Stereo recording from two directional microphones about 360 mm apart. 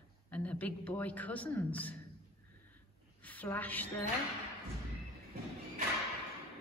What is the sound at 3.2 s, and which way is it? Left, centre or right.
Speech, centre.